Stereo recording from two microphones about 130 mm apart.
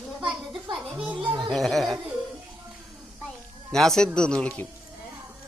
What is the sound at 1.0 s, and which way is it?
Speech, 10° right (ahead or behind).